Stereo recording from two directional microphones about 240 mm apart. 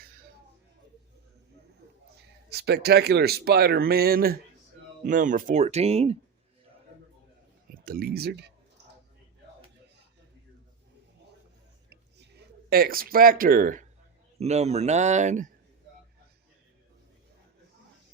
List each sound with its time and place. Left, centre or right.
2.1 s speech: right
7.7 s speech: right
12.7 s speech: right